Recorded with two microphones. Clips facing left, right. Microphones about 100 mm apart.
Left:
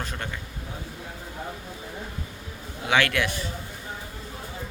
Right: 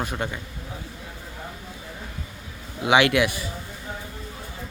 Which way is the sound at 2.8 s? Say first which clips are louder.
Right 5 dB; 15° right (ahead or behind).